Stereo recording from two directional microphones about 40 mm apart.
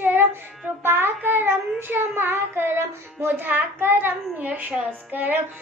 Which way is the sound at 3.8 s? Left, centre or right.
Right.